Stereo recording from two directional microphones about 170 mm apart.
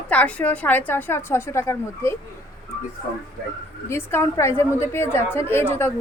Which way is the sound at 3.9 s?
15° left (ahead or behind).